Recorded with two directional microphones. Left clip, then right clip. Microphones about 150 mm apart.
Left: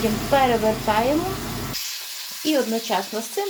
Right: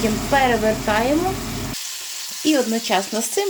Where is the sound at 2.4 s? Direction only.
20° right (ahead or behind).